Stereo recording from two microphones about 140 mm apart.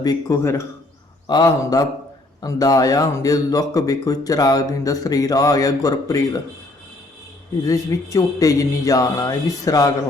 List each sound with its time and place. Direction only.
0.0 s speech: 25° left (ahead or behind)
7.6 s speech: 25° left (ahead or behind)